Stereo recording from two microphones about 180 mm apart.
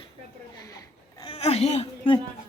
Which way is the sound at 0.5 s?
20° left (ahead or behind).